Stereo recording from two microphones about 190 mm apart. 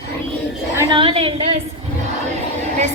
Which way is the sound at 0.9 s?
25° right (ahead or behind).